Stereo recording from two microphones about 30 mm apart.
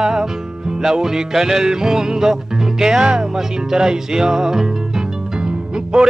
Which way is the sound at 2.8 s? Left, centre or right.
Right.